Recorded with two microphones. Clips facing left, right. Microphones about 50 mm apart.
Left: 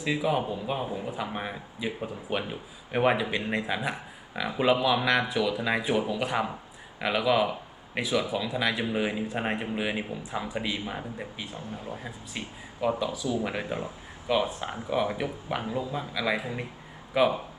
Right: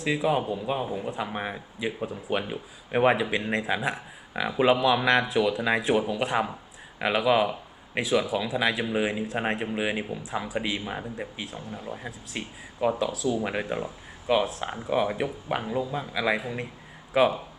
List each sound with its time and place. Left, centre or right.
0.0 s a man's voice: centre
7.0 s a man's voice: centre
9.7 s a man's voice: centre
16.4 s speech: centre
17.2 s a man's voice: centre